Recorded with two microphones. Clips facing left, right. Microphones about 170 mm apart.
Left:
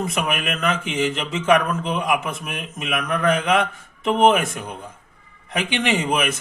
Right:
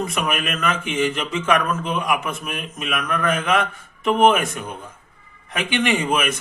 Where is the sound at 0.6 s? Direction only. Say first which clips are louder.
Even; 20° left (ahead or behind).